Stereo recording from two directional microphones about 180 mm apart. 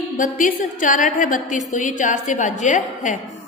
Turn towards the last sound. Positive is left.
turn(degrees=45)  # may be behind; listen again after turning